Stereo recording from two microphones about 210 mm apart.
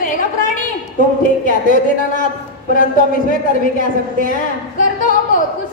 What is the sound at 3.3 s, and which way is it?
A woman's voice, 40° left (ahead or behind).